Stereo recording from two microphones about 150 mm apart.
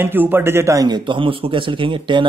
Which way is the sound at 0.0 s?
15° right (ahead or behind).